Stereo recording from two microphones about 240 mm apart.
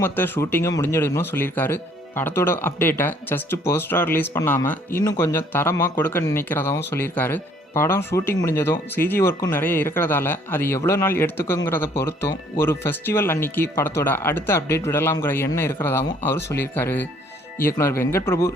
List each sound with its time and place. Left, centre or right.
0.0 s speech: centre